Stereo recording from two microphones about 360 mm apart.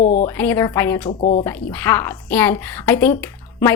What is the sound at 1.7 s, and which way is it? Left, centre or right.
A woman's voice, centre.